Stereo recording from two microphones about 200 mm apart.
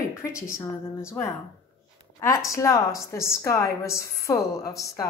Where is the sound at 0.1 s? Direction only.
15° left (ahead or behind).